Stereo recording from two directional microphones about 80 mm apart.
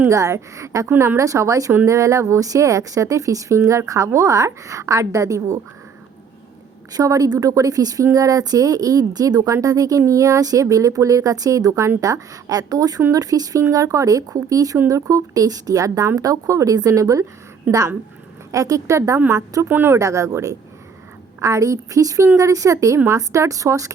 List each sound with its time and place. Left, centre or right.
0.1 s speech: right
6.9 s speech: right
19.6 s speech: right
20.0 s speech: right